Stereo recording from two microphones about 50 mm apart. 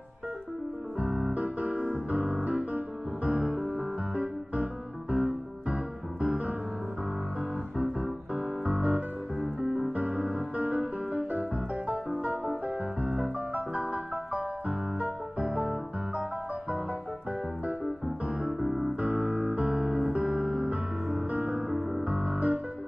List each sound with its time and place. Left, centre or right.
0.9 s keyboard: right
2.0 s music: right
7.7 s music: right
18.0 s music: right